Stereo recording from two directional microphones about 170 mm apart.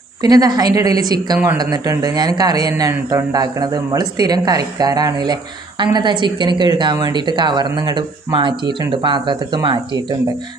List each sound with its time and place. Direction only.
0.2 s speech: 25° right (ahead or behind)